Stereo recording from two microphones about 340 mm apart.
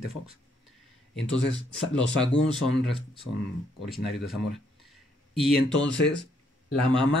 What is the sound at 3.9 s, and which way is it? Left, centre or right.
Speech, centre.